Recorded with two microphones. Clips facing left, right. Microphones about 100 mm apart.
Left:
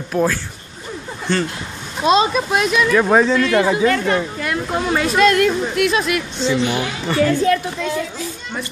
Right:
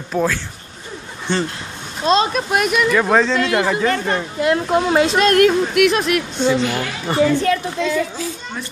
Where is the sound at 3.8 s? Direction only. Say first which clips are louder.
Left 2 dB; 30° right (ahead or behind).